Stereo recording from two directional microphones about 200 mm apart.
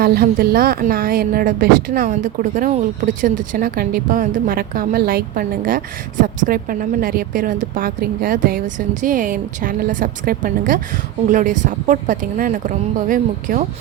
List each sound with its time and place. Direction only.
0.0 s a woman's voice: 50° right (ahead or behind)